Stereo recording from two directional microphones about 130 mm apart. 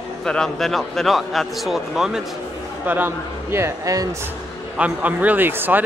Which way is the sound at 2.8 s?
15° right (ahead or behind).